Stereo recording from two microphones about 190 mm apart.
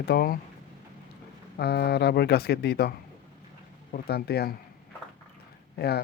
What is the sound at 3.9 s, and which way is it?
Speech, 55° left (ahead or behind).